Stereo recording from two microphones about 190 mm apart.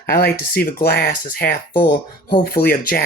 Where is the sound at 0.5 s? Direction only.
50° left (ahead or behind).